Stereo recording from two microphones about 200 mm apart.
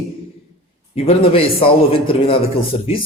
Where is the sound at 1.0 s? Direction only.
30° left (ahead or behind).